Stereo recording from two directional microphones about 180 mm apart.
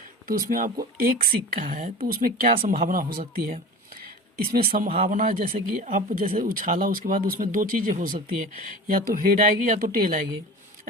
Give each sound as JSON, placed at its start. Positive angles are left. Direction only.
{"t": 0.3, "sound": "speech", "side_deg": -50}
{"t": 4.9, "sound": "speech", "side_deg": -30}
{"t": 5.1, "sound": "speech", "side_deg": -45}